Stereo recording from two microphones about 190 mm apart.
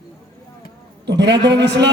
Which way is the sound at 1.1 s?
65° right (ahead or behind).